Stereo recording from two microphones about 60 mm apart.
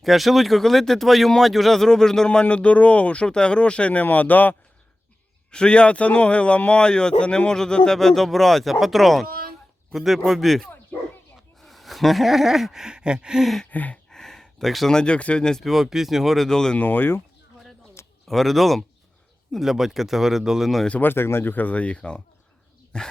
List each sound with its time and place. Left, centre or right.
0.0 s speech: centre; by 4.5 s left
5.5 s speech: centre
11.6 s gasp: centre
13.7 s gasp: left
14.1 s a sound: centre
14.9 s speech: centre
15.6 s speech: centre
16.5 s speech: centre
16.7 s speech: left
18.3 s speech: centre
21.0 s speech: left
21.5 s speech: left